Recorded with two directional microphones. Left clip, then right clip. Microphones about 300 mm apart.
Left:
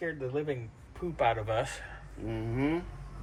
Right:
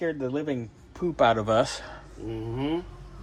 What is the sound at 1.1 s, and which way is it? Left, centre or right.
Speech, right.